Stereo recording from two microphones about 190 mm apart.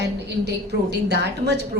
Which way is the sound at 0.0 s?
60° right (ahead or behind).